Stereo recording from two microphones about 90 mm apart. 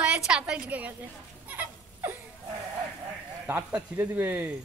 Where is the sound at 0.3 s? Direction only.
10° right (ahead or behind).